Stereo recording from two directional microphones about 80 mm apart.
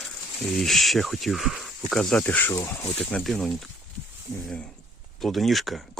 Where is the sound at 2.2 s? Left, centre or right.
Left.